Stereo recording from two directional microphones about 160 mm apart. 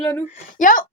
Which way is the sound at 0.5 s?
55° left (ahead or behind).